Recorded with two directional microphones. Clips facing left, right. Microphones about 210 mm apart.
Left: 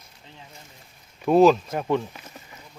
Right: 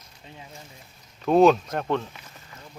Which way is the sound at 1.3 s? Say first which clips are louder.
Left 1 dB; 5° left (ahead or behind).